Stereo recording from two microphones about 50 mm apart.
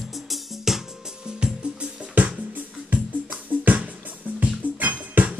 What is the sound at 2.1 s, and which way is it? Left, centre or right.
Music, right.